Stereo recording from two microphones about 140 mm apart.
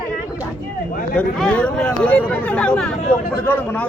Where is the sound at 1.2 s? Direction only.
10° left (ahead or behind).